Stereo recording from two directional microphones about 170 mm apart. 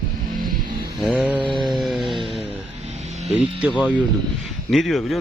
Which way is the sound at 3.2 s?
5° right (ahead or behind).